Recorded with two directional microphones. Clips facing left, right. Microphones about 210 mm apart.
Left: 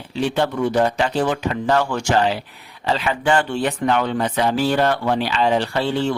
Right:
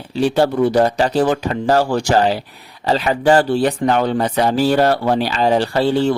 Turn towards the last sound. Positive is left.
turn(degrees=-40)  # may be behind; listen again after turning